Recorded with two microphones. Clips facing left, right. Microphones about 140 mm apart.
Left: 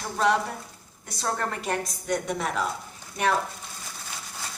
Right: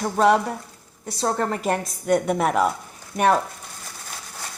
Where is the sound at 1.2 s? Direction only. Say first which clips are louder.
Right 6 dB; 35° right (ahead or behind); by 2.7 s 55° right (ahead or behind).